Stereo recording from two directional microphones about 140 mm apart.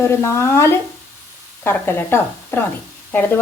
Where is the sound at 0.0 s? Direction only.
20° left (ahead or behind).